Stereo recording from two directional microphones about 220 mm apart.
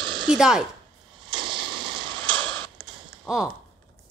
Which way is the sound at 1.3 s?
20° right (ahead or behind).